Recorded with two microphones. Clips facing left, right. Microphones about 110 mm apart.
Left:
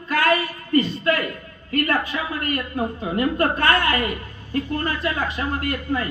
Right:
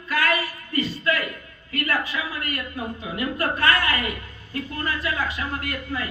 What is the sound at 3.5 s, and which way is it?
A man's voice, 25° left (ahead or behind).